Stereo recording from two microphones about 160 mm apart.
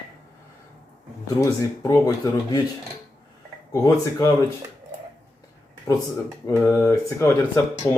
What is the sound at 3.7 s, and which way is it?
Speech, 20° left (ahead or behind).